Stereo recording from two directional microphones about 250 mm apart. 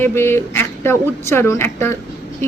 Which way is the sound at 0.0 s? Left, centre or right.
Centre.